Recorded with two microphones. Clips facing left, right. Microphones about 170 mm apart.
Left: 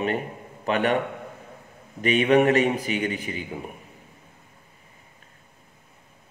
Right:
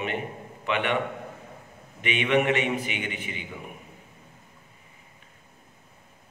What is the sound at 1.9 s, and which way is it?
A man's voice, 40° left (ahead or behind).